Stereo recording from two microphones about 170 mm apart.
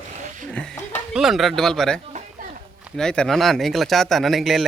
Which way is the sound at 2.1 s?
50° right (ahead or behind).